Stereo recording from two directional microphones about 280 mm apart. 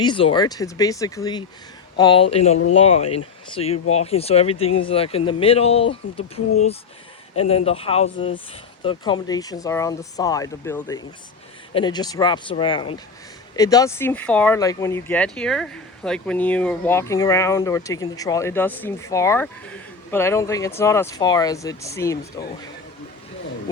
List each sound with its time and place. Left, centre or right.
0.0 s speech: centre